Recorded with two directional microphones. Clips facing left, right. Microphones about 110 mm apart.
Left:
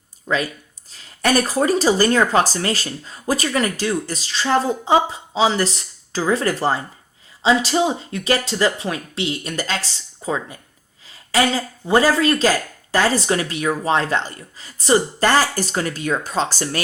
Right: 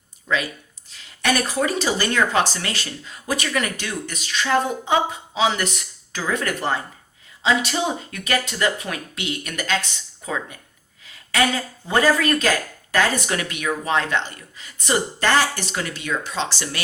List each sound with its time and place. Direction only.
0.3 s speech: 40° left (ahead or behind)